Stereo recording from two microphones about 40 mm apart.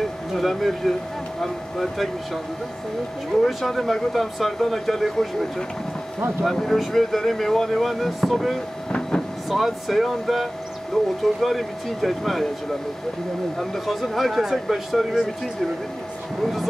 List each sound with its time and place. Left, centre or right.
0.3 s speech: centre
3.4 s speech: centre
10.9 s speech: centre
11.4 s speech: centre
13.6 s speech: centre